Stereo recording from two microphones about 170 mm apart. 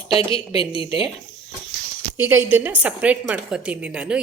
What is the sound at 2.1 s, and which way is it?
A woman's voice, 10° right (ahead or behind).